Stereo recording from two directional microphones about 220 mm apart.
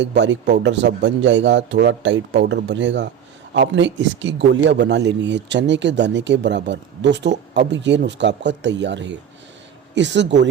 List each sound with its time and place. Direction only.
0.5 s a man's voice: 55° right (ahead or behind)